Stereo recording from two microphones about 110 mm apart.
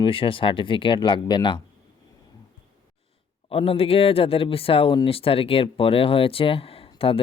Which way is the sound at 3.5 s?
60° left (ahead or behind).